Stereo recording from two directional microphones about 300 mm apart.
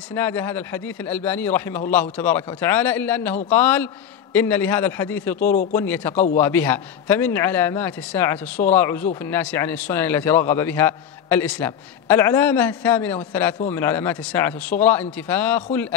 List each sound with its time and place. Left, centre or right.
0.1 s a man's voice: centre
5.5 s speech: left
5.8 s speech: centre